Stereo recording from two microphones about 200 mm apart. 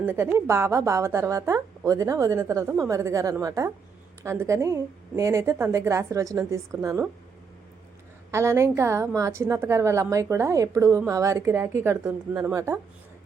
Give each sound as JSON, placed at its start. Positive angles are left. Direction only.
{"t": 0.0, "sound": "a woman's voice", "side_deg": -10}
{"t": 8.3, "sound": "a woman's voice", "side_deg": -15}